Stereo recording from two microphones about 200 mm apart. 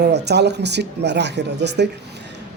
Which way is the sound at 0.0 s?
55° right (ahead or behind).